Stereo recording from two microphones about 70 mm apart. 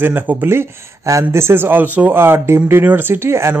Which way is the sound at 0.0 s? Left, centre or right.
Right.